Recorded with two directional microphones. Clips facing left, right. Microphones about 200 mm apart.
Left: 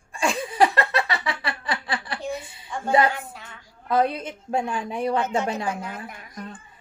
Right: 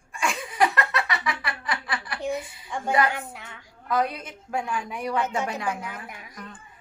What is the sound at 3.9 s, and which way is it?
A woman's voice, 25° left (ahead or behind).